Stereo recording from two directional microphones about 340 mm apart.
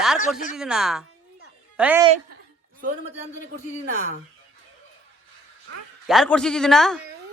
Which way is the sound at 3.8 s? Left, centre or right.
Right.